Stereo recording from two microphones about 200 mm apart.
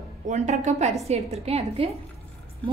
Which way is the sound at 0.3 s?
35° right (ahead or behind).